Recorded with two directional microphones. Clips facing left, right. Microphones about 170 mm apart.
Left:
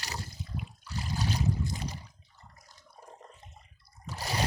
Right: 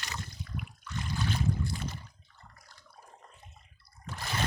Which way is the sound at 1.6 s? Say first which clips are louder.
Even; 20° left (ahead or behind).